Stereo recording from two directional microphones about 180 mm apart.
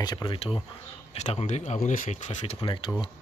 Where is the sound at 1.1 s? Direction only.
40° left (ahead or behind).